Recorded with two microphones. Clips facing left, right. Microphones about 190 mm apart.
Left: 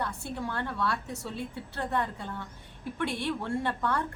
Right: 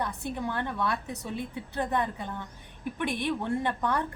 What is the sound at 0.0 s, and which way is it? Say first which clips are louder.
A woman's voice: right 2 dB; 20° right (ahead or behind).